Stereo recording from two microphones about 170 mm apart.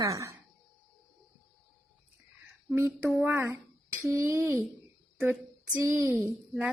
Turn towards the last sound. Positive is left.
turn(degrees=-15)  # may be behind; listen again after turning